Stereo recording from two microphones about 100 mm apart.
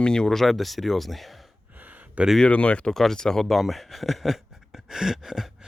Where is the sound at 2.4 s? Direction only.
10° left (ahead or behind); by 5.4 s 5° right (ahead or behind).